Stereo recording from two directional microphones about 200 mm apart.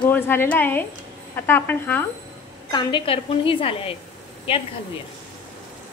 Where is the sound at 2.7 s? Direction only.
25° left (ahead or behind).